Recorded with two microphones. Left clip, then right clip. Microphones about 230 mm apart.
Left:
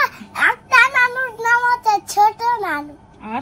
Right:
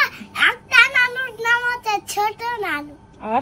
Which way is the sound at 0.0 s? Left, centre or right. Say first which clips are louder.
Left 1 dB; centre.